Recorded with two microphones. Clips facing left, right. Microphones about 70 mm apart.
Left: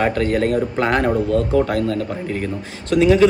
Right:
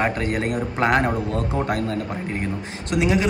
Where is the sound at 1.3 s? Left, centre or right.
Right.